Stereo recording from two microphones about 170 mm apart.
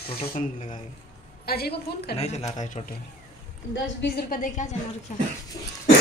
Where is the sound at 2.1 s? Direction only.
40° left (ahead or behind).